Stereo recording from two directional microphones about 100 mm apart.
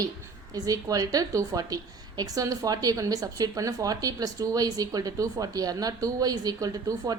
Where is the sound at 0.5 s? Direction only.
35° right (ahead or behind).